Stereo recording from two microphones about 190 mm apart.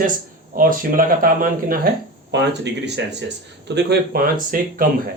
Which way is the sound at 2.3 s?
65° right (ahead or behind).